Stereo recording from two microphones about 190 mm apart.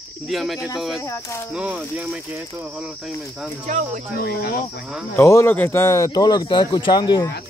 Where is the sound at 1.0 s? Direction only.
15° left (ahead or behind).